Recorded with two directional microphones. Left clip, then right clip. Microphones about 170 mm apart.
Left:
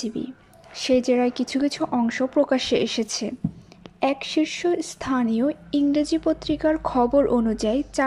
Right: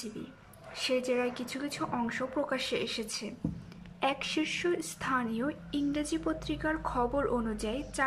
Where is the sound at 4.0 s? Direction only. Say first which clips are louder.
Left 8 dB; 25° left (ahead or behind).